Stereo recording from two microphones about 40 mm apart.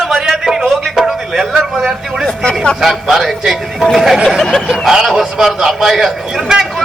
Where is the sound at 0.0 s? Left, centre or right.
Centre.